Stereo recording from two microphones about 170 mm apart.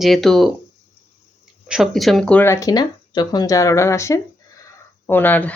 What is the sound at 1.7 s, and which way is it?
Speech, centre (ahead or behind).